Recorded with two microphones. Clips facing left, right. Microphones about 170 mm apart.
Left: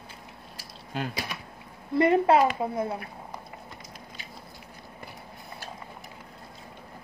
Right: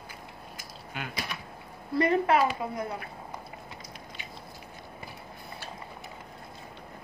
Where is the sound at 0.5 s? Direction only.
35° left (ahead or behind).